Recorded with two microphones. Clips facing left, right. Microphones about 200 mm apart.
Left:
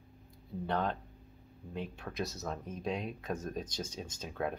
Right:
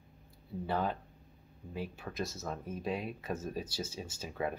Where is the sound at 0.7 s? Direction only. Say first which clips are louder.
Even; 5° right (ahead or behind).